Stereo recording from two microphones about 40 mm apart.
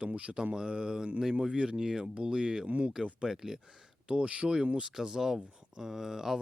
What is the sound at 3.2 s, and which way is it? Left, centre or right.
Speech, centre.